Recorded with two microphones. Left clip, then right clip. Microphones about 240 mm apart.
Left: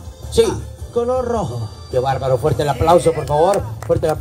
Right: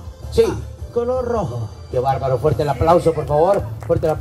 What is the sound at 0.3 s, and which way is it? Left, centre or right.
Speech, left.